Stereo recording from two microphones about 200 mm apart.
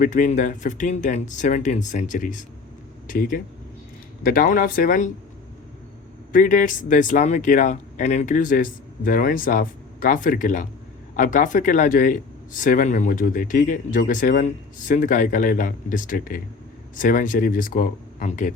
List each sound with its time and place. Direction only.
0.0 s speech: 40° left (ahead or behind)
6.3 s speech: 40° left (ahead or behind)